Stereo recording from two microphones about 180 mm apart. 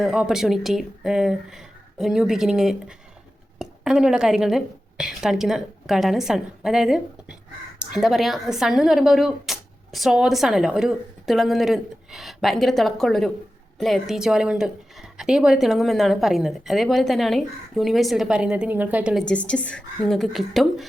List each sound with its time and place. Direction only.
0.0 s speech: 5° right (ahead or behind)
19.2 s speech: 5° left (ahead or behind)